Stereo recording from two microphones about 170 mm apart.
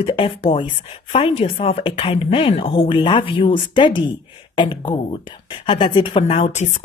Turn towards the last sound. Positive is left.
turn(degrees=40)  # may be behind; listen again after turning